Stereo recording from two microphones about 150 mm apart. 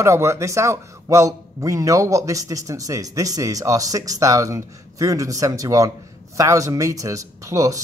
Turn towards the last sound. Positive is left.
turn(degrees=-20)  # may be behind; listen again after turning